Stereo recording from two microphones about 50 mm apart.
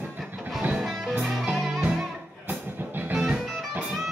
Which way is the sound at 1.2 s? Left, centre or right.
Centre.